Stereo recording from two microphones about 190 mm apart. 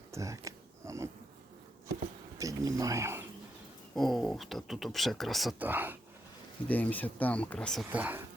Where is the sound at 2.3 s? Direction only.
15° right (ahead or behind).